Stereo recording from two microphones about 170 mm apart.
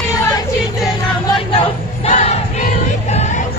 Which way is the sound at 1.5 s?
35° left (ahead or behind).